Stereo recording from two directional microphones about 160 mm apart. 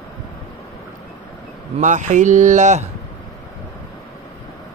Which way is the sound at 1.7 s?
50° right (ahead or behind).